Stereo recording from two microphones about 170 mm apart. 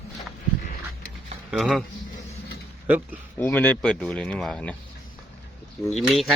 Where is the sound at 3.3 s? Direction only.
10° left (ahead or behind).